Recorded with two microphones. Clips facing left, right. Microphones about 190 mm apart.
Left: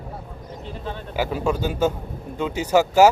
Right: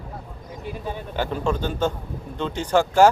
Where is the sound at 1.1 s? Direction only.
10° left (ahead or behind).